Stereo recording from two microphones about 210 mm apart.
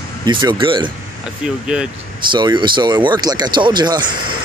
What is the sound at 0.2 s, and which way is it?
Speech, 20° right (ahead or behind).